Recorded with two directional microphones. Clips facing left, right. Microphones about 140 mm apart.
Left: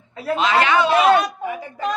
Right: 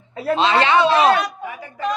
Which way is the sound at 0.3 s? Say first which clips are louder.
Right 1 dB; 30° right (ahead or behind).